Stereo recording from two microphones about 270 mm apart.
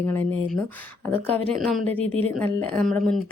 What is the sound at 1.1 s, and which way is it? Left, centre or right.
Speech, right.